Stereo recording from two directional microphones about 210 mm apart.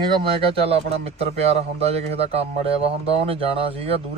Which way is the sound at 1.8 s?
30° right (ahead or behind).